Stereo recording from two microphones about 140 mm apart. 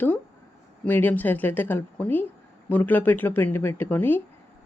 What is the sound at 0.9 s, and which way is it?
A woman's voice, 10° left (ahead or behind).